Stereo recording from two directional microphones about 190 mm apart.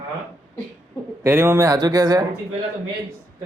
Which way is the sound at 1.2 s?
10° right (ahead or behind).